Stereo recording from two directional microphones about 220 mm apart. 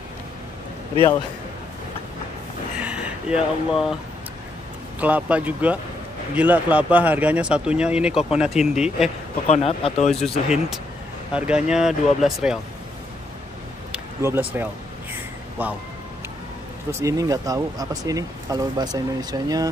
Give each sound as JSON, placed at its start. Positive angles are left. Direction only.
{"t": 2.8, "sound": "a sound", "side_deg": -5}
{"t": 5.0, "sound": "speech", "side_deg": -5}
{"t": 9.5, "sound": "speech", "side_deg": 25}
{"t": 10.2, "sound": "speech", "side_deg": 0}
{"t": 13.9, "sound": "speech", "side_deg": -10}
{"t": 16.9, "sound": "speech", "side_deg": -15}